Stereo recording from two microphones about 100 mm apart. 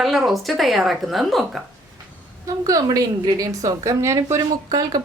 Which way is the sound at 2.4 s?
35° right (ahead or behind).